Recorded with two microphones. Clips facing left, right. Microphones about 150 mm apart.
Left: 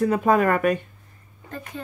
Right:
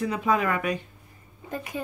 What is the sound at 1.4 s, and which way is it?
Speech, 10° right (ahead or behind).